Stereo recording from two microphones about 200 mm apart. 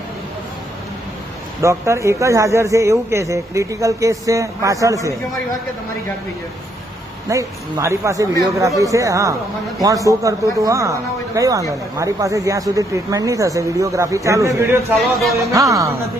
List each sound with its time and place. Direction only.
1.6 s speech: 15° right (ahead or behind)
7.3 s speech: 15° right (ahead or behind)
14.9 s speech: centre (ahead or behind)
15.4 s speech: 15° right (ahead or behind)